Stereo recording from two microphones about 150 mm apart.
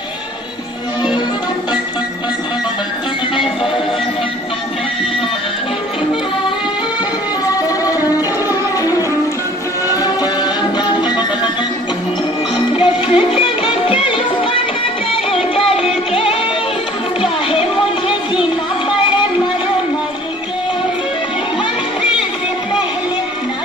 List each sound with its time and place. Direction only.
9.8 s music: 25° left (ahead or behind)
12.5 s music: 35° left (ahead or behind)